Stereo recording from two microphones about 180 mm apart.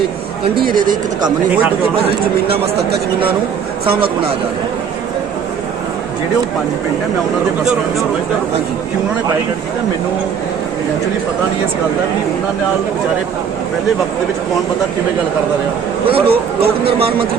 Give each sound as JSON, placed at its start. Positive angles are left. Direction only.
{"t": 0.6, "sound": "speech", "side_deg": -50}
{"t": 2.7, "sound": "speech", "side_deg": -60}
{"t": 16.0, "sound": "speech", "side_deg": -30}